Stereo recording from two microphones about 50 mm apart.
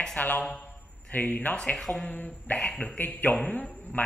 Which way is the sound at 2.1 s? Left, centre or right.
Left.